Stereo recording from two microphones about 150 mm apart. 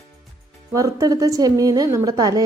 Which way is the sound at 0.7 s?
20° right (ahead or behind).